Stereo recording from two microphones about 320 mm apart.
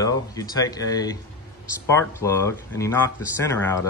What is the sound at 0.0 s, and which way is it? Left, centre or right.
Speech, centre.